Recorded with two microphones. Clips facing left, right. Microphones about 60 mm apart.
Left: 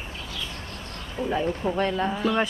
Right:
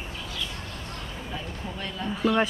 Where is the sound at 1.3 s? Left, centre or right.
Left.